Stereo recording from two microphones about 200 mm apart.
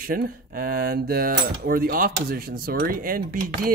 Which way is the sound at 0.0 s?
45° right (ahead or behind).